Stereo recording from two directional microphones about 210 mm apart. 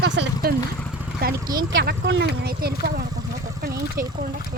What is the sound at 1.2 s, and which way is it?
Speech, 45° right (ahead or behind).